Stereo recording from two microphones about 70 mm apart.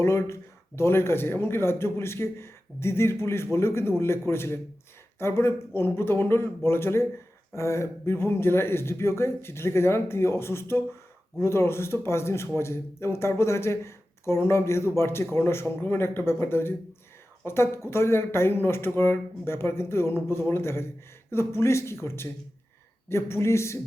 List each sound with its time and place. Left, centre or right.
0.0 s speech: left